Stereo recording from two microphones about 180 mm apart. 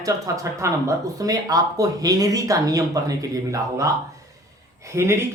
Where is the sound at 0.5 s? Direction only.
15° right (ahead or behind).